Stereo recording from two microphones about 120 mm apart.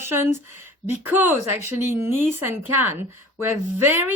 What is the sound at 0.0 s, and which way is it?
Speech, 20° right (ahead or behind).